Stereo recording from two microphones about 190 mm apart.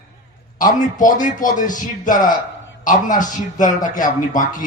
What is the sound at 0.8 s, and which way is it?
A man's voice, 45° left (ahead or behind).